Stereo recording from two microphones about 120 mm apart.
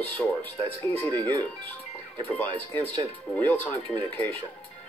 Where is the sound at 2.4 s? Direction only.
15° left (ahead or behind).